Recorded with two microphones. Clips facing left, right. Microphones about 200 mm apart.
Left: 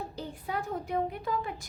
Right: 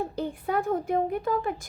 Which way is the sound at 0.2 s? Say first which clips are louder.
Right 7 dB; 55° right (ahead or behind).